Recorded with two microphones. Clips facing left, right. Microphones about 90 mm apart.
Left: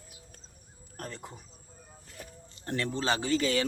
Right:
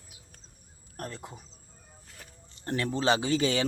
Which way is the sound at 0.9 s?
15° right (ahead or behind).